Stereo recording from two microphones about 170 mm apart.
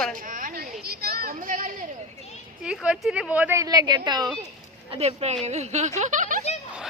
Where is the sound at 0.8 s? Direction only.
65° right (ahead or behind).